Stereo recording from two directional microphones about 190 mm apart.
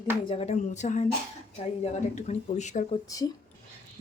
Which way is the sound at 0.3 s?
35° left (ahead or behind).